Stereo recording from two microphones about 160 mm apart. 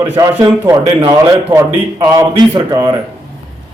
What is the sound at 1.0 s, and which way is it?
Speech, 30° right (ahead or behind).